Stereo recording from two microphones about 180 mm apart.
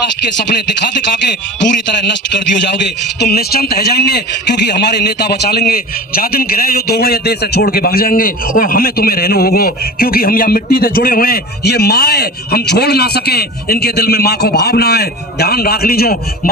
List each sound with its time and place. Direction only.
3.2 s a man's voice: 60° left (ahead or behind)